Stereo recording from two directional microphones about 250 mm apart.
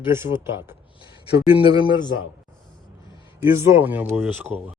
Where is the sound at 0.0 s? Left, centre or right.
Centre.